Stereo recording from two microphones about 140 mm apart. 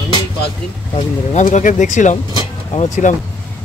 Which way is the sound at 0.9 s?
55° left (ahead or behind).